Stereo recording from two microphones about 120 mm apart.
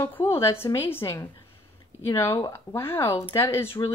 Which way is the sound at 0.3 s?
20° left (ahead or behind).